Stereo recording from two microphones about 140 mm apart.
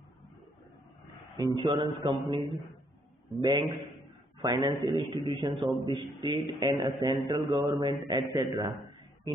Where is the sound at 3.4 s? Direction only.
25° right (ahead or behind).